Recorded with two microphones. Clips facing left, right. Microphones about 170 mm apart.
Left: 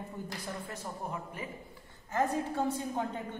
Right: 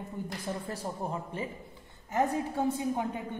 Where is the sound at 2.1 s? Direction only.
15° right (ahead or behind).